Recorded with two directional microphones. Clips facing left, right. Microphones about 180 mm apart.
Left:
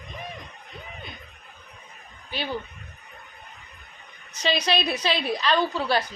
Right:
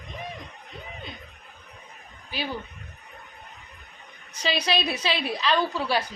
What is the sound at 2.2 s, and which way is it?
Speech, 5° right (ahead or behind).